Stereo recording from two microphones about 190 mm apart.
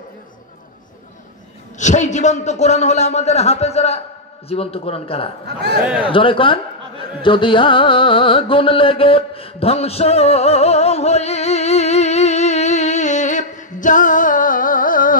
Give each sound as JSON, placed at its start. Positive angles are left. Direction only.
{"t": 1.8, "sound": "a man's voice", "side_deg": 40}
{"t": 7.2, "sound": "carnatic music", "side_deg": 25}